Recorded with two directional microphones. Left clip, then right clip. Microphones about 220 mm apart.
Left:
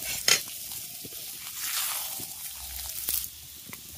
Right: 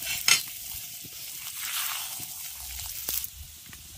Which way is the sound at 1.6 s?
Centre (ahead or behind).